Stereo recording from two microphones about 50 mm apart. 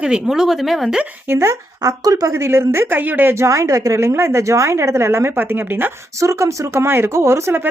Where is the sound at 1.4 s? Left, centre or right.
Right.